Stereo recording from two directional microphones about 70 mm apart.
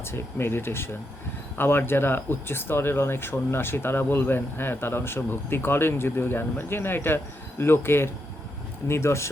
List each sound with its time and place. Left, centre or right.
0.0 s speech: left